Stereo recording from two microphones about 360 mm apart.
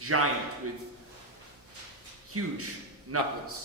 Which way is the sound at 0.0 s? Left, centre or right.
Right.